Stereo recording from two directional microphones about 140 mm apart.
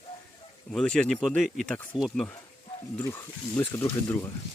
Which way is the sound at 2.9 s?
20° left (ahead or behind).